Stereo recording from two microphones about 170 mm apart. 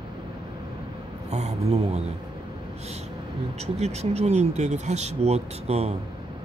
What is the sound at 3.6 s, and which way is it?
Speech, 40° right (ahead or behind).